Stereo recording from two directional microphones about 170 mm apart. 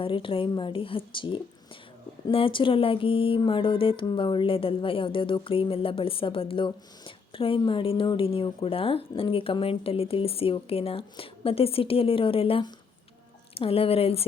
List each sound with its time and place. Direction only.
0.0 s speech: 30° left (ahead or behind)